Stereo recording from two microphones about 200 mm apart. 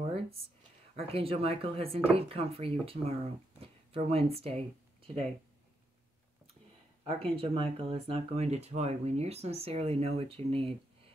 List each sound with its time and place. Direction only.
0.9 s speech: 30° right (ahead or behind)
7.1 s speech: 30° right (ahead or behind)